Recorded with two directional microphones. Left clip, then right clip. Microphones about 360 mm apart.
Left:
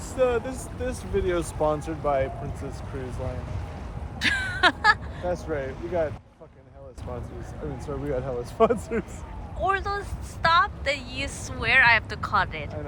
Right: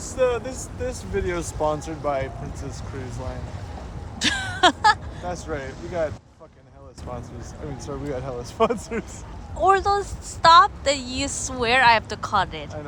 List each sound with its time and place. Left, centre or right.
0.0 s speech: right
4.2 s a sound: centre
5.3 s speech: centre
8.1 s speech: right
9.6 s speech: centre